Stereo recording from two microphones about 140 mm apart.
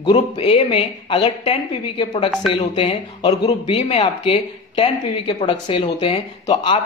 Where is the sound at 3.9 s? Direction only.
45° left (ahead or behind).